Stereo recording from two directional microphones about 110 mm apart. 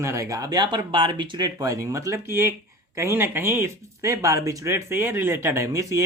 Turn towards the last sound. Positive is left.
turn(degrees=-30)  # may be behind; listen again after turning